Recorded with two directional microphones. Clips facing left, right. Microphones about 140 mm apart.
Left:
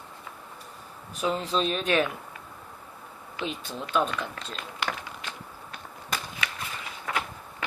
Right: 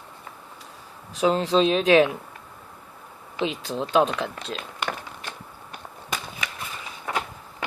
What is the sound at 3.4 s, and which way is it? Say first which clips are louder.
Speech: right 7 dB; 90° right.